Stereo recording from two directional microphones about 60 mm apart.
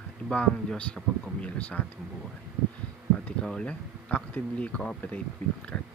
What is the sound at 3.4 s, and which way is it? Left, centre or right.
Speech, centre.